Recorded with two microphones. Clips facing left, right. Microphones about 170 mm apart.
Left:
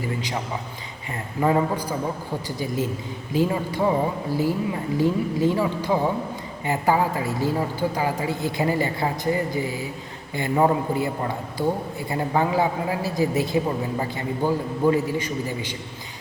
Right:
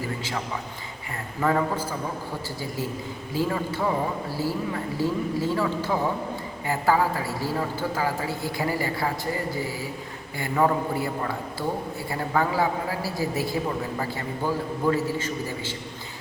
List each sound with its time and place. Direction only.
1.4 s a man's voice: 20° left (ahead or behind)